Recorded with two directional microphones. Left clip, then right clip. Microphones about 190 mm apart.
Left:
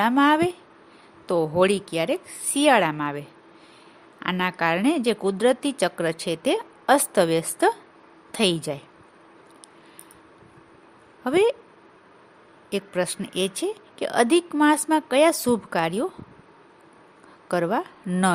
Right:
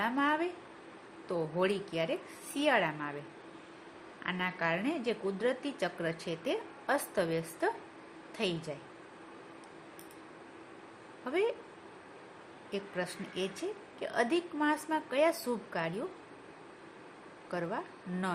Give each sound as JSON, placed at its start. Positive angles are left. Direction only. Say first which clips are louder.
{"t": 0.0, "sound": "a woman's voice", "louder": "left 12 dB", "side_deg": 60}
{"t": 4.2, "sound": "a woman's voice", "louder": "left 10 dB", "side_deg": 60}
{"t": 11.2, "sound": "a woman's voice", "louder": "left 12 dB", "side_deg": 60}
{"t": 12.7, "sound": "a woman's voice", "louder": "left 11 dB", "side_deg": 60}
{"t": 17.5, "sound": "a woman's voice", "louder": "left 13 dB", "side_deg": 60}